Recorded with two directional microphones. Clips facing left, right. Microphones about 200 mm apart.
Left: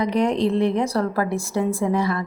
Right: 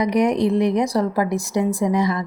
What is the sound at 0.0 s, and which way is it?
Speech, 15° right (ahead or behind).